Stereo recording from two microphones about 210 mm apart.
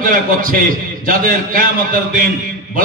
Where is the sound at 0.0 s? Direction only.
40° right (ahead or behind).